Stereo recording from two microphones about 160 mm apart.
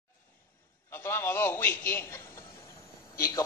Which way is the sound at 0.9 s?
15° left (ahead or behind).